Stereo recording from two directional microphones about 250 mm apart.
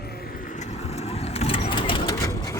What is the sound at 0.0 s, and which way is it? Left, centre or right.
Vehicle, left.